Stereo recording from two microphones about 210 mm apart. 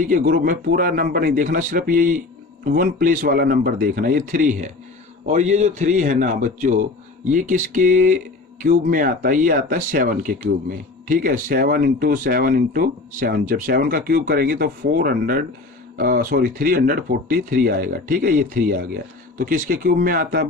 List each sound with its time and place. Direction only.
0.0 s speech: 40° right (ahead or behind)